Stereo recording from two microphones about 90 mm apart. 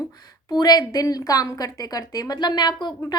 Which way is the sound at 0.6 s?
45° left (ahead or behind).